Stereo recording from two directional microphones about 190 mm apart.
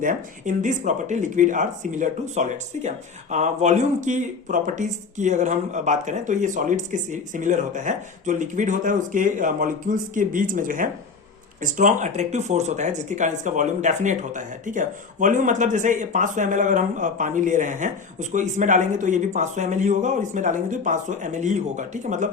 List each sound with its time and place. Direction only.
0.0 s speech: 45° right (ahead or behind)